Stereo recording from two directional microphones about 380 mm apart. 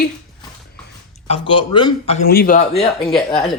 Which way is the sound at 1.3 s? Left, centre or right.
Centre.